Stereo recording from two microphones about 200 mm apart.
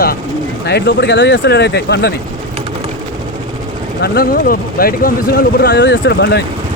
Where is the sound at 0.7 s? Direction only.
55° left (ahead or behind).